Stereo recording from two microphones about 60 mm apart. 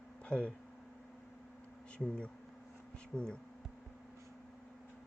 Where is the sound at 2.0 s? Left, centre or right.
Centre.